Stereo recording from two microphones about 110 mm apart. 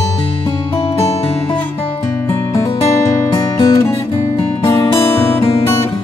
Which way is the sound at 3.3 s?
30° left (ahead or behind).